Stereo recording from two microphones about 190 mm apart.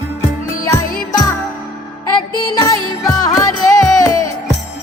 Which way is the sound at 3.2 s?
20° left (ahead or behind).